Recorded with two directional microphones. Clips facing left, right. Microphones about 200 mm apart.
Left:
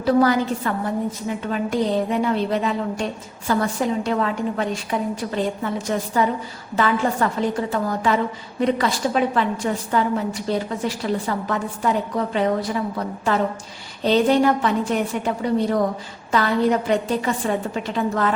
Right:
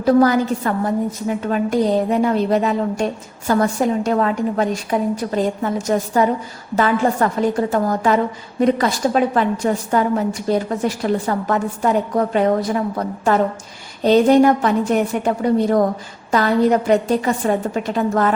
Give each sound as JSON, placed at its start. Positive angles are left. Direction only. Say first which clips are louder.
{"t": 0.0, "sound": "a woman's voice", "louder": "right 3 dB", "side_deg": -45}